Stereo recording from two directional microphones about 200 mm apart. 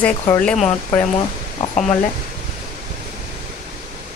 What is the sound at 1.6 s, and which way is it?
Speech, 35° left (ahead or behind).